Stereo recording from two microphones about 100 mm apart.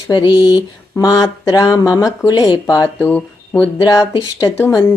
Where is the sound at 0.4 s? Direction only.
40° left (ahead or behind).